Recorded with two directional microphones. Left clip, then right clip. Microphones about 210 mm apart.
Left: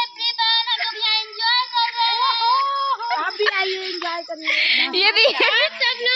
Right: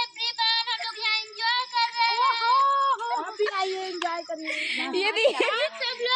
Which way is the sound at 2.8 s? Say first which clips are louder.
Left 3 dB; 35° left (ahead or behind).